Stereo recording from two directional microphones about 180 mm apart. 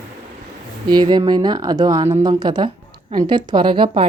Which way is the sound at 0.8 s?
25° right (ahead or behind).